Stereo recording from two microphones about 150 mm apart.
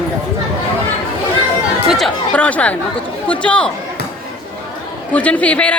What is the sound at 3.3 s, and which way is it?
Speech, 10° left (ahead or behind).